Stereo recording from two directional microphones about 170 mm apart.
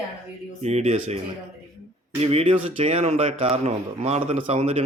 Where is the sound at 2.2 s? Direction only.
35° right (ahead or behind).